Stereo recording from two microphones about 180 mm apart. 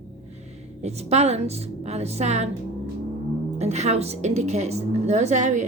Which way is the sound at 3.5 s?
40° right (ahead or behind).